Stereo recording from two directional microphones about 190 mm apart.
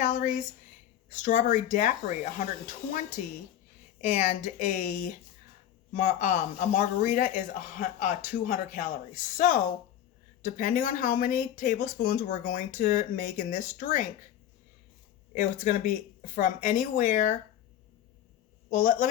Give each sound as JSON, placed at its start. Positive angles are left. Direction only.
{"t": 0.0, "sound": "a sound", "side_deg": 40}
{"t": 1.1, "sound": "speech", "side_deg": 40}
{"t": 15.4, "sound": "speech", "side_deg": 45}
{"t": 18.7, "sound": "speech", "side_deg": 45}